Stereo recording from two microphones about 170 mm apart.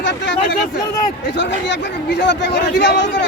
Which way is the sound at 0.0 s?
90° left.